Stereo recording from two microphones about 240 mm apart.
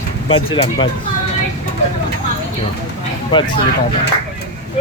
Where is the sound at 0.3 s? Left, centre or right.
Left.